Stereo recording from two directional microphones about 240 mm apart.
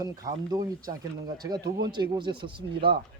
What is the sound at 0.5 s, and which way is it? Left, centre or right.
Speech, centre.